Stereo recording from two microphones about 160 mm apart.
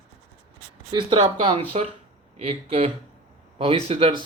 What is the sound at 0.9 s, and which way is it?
Speech, 30° right (ahead or behind).